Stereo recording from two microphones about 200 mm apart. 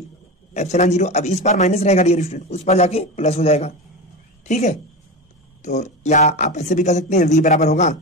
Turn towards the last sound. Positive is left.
turn(degrees=35)  # may be behind; listen again after turning